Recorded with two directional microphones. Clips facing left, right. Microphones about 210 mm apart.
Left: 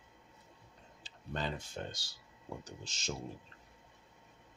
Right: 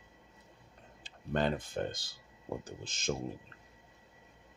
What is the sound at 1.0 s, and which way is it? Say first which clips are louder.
Speech: right 8 dB; 55° right (ahead or behind).